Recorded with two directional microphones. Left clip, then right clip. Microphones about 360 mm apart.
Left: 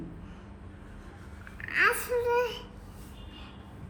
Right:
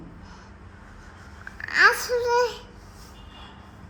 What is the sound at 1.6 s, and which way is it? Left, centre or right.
Babbling, centre.